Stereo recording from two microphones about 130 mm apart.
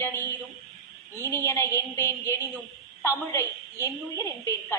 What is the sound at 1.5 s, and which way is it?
A woman's voice, 20° left (ahead or behind).